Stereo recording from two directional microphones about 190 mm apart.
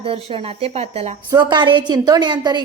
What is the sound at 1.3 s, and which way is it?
Speech, 25° right (ahead or behind).